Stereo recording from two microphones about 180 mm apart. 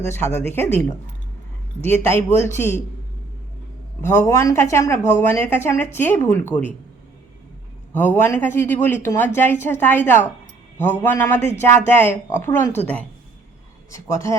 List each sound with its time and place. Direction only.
0.1 s speech: 15° left (ahead or behind)
4.0 s speech: 15° left (ahead or behind)
7.9 s speech: 10° left (ahead or behind)